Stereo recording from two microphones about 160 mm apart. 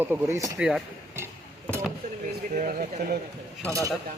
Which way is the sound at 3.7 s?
20° right (ahead or behind).